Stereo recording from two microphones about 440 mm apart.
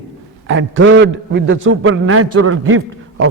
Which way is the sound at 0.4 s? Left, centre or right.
Right.